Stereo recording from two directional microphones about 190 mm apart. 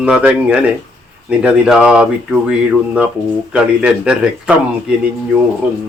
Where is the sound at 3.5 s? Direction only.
5° right (ahead or behind).